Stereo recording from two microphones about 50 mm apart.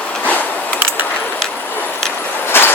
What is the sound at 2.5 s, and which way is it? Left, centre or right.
Vehicle, left.